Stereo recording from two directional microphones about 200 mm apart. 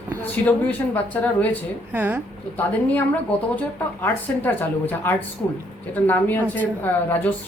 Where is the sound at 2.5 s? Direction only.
10° left (ahead or behind).